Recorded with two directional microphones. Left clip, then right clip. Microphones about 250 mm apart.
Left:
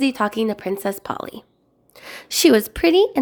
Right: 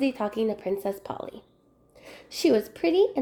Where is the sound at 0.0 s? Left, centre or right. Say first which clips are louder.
Left 6 dB; left.